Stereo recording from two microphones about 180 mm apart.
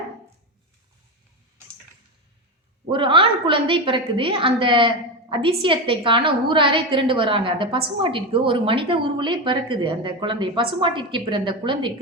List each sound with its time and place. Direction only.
2.9 s a woman's voice: 30° right (ahead or behind)